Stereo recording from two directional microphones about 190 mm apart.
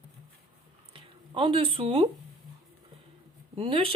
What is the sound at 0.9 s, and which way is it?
Speech, 25° right (ahead or behind).